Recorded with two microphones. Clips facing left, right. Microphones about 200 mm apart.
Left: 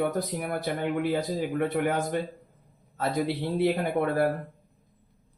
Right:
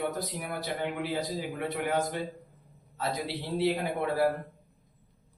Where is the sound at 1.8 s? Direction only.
50° left (ahead or behind).